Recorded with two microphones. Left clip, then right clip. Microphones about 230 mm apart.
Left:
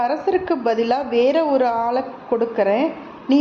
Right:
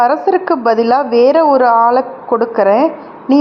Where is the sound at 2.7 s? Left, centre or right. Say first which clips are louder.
Right 8 dB; centre.